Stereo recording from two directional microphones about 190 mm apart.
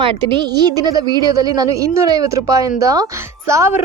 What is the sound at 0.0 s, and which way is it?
Speech, 25° right (ahead or behind).